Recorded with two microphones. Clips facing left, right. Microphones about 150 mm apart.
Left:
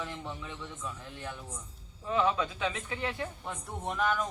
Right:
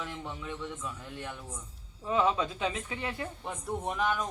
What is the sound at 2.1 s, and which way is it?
Speech, 25° right (ahead or behind).